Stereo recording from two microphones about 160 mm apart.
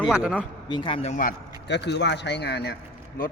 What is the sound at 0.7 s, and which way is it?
Speech, 30° left (ahead or behind).